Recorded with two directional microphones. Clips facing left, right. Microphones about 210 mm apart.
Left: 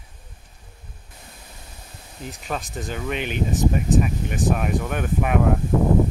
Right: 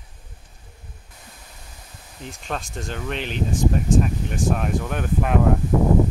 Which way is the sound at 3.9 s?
5° left (ahead or behind).